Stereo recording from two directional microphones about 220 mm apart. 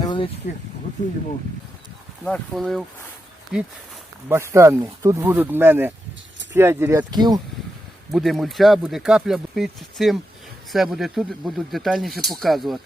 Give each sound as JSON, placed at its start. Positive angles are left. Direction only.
{"t": 0.0, "sound": "a sound", "side_deg": 20}
{"t": 2.2, "sound": "speech", "side_deg": 5}
{"t": 8.1, "sound": "speech", "side_deg": 0}